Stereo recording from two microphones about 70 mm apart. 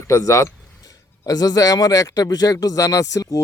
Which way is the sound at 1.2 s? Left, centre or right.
Left.